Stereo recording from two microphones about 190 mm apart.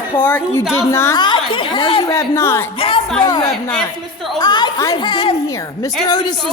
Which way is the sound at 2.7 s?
30° left (ahead or behind).